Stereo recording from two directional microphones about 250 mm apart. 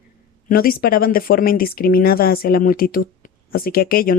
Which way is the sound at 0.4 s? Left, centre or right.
Left.